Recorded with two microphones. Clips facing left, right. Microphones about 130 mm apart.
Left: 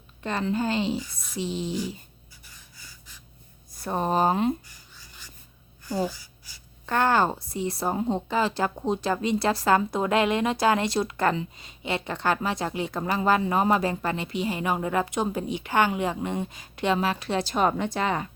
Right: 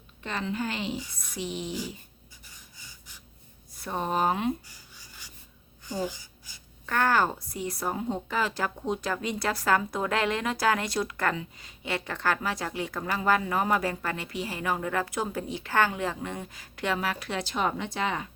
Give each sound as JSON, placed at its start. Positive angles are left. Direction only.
{"t": 0.2, "sound": "a woman's voice", "side_deg": 40}
{"t": 2.7, "sound": "gasp", "side_deg": -15}
{"t": 3.8, "sound": "speech", "side_deg": 40}
{"t": 4.9, "sound": "filing", "side_deg": -15}
{"t": 6.8, "sound": "a woman's voice", "side_deg": 25}